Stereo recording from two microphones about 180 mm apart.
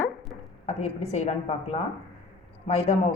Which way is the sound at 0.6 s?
40° left (ahead or behind).